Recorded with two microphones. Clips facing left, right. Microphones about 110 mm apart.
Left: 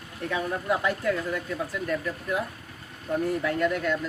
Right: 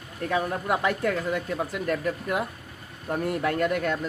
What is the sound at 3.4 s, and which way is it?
Speech, 55° right (ahead or behind).